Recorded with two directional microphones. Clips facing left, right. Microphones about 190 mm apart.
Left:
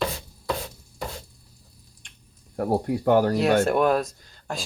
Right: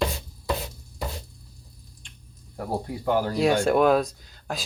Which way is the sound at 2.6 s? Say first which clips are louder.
Left 6 dB; 55° left (ahead or behind).